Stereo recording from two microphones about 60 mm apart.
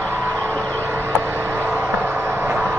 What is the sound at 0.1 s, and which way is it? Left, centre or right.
Vehicle, right.